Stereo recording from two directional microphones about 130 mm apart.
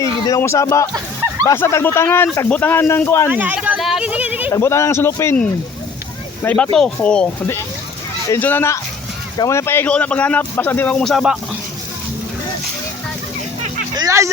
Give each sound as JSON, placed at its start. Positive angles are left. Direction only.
{"t": 0.0, "sound": "speech", "side_deg": 25}
{"t": 3.2, "sound": "speech", "side_deg": -10}
{"t": 3.8, "sound": "a sound", "side_deg": 0}
{"t": 4.5, "sound": "speech", "side_deg": 20}
{"t": 6.4, "sound": "speech", "side_deg": 10}
{"t": 8.3, "sound": "speech", "side_deg": 15}
{"t": 11.0, "sound": "speech", "side_deg": 0}
{"t": 13.9, "sound": "a sound", "side_deg": -25}